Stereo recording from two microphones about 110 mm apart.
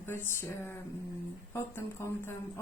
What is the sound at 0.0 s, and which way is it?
Speech, 20° left (ahead or behind).